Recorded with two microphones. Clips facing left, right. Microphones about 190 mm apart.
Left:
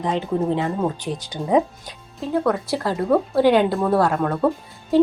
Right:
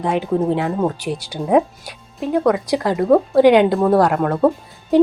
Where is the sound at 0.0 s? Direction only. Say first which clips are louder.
Right 3 dB; 10° right (ahead or behind).